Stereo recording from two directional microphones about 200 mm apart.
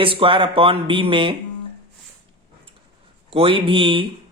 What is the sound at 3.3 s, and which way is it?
Speech, 25° right (ahead or behind).